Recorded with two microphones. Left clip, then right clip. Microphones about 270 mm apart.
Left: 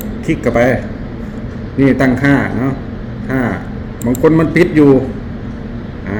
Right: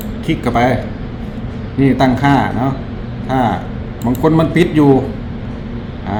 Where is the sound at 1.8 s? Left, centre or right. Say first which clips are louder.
Left 1 dB; centre.